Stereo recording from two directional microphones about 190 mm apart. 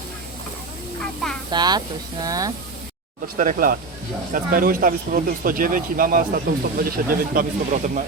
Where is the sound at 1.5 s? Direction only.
20° right (ahead or behind).